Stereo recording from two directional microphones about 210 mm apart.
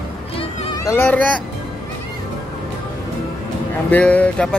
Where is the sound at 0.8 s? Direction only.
10° left (ahead or behind).